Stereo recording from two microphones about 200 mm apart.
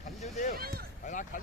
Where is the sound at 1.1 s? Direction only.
40° left (ahead or behind).